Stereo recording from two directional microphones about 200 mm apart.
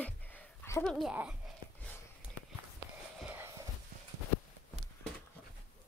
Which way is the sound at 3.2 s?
5° right (ahead or behind).